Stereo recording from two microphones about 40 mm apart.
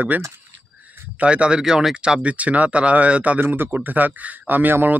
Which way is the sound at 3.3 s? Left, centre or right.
Right.